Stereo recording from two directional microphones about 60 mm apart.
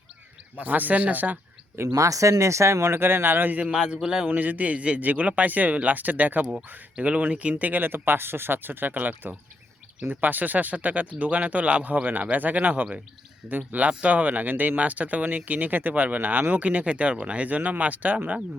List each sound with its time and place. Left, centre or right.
0.6 s speech: right
1.9 s speech: right
3.6 s a man's voice: centre
4.3 s speech: right